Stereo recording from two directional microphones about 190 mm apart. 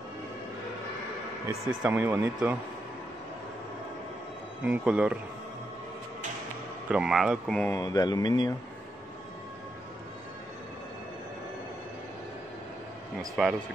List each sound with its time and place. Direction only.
1.8 s speech: 10° right (ahead or behind)
4.6 s speech: 5° right (ahead or behind)
6.9 s speech: 5° right (ahead or behind)
7.8 s speech: 20° left (ahead or behind)
13.4 s speech: centre (ahead or behind)